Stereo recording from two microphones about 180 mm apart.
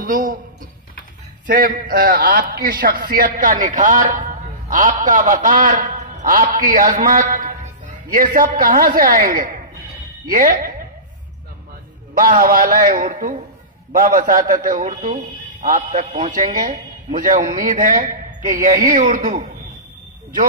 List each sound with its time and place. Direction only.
0.0 s a sound: 50° right (ahead or behind)
1.5 s a man's voice: 50° right (ahead or behind)
12.1 s a man's voice: 50° right (ahead or behind)